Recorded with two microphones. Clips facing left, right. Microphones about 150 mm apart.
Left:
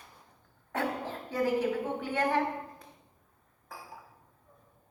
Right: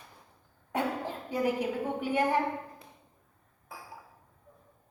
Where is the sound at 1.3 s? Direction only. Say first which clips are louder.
Left 1 dB; 15° right (ahead or behind).